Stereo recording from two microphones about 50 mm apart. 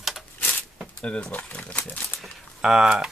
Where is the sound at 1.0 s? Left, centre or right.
Centre.